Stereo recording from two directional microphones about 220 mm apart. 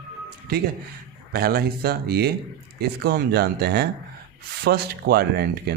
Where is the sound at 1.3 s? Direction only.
45° right (ahead or behind).